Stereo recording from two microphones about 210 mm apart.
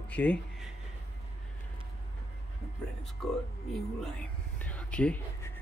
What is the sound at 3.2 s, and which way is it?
Speech, 5° left (ahead or behind).